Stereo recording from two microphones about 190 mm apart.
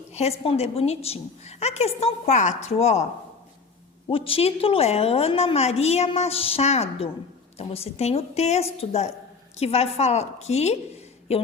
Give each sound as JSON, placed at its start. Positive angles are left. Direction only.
{"t": 0.1, "sound": "a woman's voice", "side_deg": 35}
{"t": 4.1, "sound": "a woman's voice", "side_deg": 30}